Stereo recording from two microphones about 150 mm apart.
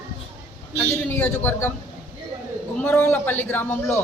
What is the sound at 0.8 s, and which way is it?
Speech, 15° left (ahead or behind).